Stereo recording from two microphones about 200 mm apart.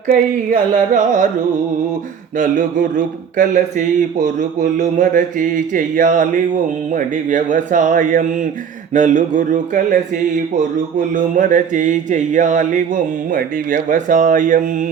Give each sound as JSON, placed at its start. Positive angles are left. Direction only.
{"t": 0.1, "sound": "mantra", "side_deg": -40}
{"t": 2.4, "sound": "mantra", "side_deg": -40}